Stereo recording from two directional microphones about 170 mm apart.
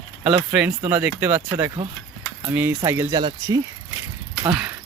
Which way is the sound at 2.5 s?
15° right (ahead or behind).